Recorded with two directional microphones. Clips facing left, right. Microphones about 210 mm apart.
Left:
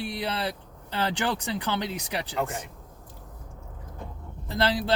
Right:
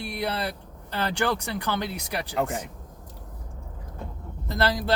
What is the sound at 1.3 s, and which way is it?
Speech, 15° left (ahead or behind).